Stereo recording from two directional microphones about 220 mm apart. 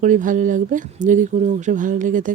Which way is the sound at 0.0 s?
35° right (ahead or behind).